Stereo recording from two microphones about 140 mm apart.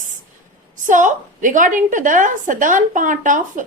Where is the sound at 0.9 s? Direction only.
65° right (ahead or behind).